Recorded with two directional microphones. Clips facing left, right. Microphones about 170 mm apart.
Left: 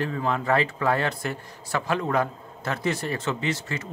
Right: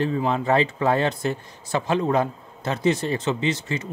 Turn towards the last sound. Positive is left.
turn(degrees=-20)  # may be behind; listen again after turning